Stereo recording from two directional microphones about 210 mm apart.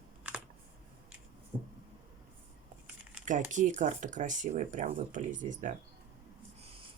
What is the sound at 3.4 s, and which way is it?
Speech, 35° right (ahead or behind).